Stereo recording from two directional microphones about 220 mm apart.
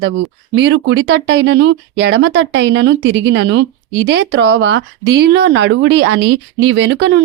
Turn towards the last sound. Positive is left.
turn(degrees=-55)  # may be behind; listen again after turning